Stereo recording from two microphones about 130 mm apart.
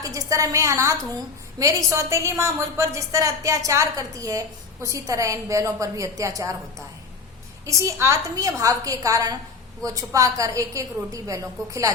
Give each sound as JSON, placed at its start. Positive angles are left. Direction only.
{"t": 0.0, "sound": "a woman's voice", "side_deg": -25}
{"t": 7.6, "sound": "a woman's voice", "side_deg": -25}